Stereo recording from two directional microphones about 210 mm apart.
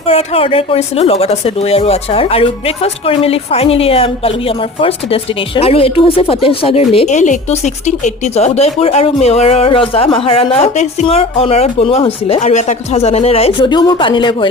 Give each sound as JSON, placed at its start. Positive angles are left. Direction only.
{"t": 0.0, "sound": "speech", "side_deg": 30}